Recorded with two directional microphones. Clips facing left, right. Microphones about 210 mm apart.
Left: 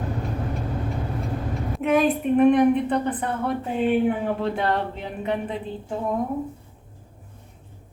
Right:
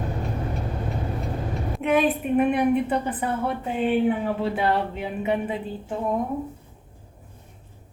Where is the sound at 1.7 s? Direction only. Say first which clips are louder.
Left 1 dB; centre (ahead or behind).